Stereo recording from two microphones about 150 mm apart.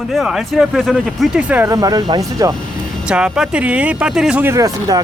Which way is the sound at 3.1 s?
5° right (ahead or behind).